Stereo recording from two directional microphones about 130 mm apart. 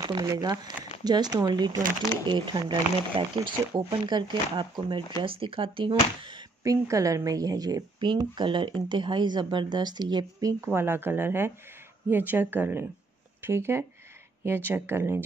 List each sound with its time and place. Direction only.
0.0 s speech: 30° right (ahead or behind)
6.6 s a woman's voice: 25° right (ahead or behind)
10.6 s a woman's voice: 20° right (ahead or behind)